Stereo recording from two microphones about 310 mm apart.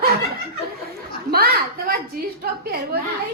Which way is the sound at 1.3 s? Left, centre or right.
Right.